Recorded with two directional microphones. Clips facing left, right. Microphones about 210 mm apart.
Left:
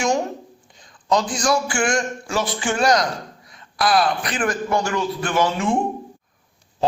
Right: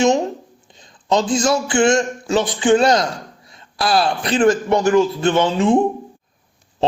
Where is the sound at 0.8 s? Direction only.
25° right (ahead or behind).